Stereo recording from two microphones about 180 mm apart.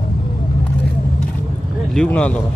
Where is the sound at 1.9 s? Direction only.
5° left (ahead or behind).